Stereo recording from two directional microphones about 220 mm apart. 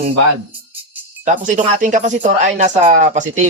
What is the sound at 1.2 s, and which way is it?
Speech, 35° right (ahead or behind).